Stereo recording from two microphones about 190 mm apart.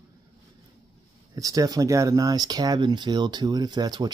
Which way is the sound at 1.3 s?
20° right (ahead or behind).